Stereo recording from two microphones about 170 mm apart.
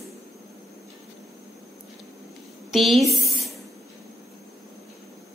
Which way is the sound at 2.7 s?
Centre (ahead or behind).